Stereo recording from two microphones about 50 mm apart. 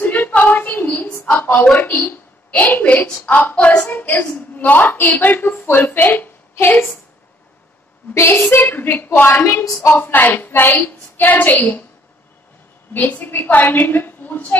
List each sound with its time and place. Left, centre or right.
0.0 s a sound: left
0.8 s a sound: left
1.3 s a sound: left
2.0 s a woman's voice: left
3.5 s child singing: left
3.9 s a woman's voice: left
5.9 s a woman's voice: left
8.1 s a woman's voice: left
12.9 s a woman's voice: left